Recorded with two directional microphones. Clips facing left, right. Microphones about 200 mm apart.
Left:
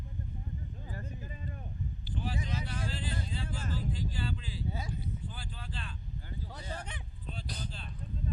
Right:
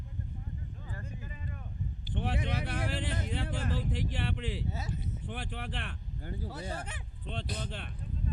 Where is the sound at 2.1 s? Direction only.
75° right (ahead or behind).